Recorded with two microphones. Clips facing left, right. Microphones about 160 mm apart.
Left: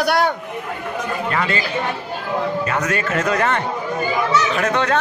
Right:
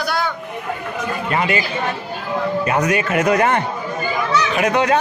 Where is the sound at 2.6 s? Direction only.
15° right (ahead or behind).